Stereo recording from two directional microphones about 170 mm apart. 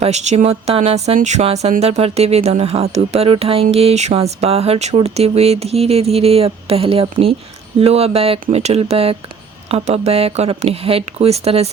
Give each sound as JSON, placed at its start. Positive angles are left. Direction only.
{"t": 0.0, "sound": "speech", "side_deg": -40}